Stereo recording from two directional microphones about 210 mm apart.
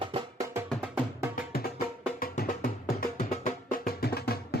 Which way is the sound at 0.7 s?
5° right (ahead or behind).